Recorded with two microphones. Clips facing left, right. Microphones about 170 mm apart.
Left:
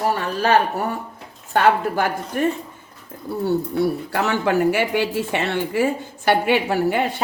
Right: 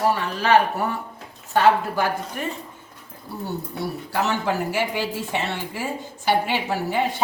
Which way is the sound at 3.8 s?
60° left (ahead or behind).